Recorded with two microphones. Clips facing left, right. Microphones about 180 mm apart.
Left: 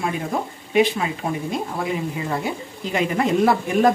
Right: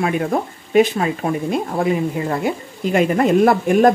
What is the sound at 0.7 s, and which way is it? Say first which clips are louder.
Speech: right 4 dB; 50° right (ahead or behind).